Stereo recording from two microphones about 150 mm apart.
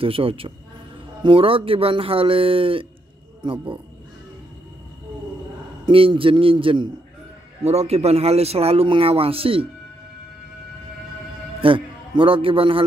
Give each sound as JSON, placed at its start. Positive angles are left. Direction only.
{"t": 0.0, "sound": "speech", "side_deg": -40}
{"t": 5.9, "sound": "speech", "side_deg": -35}
{"t": 11.6, "sound": "a man's voice", "side_deg": -35}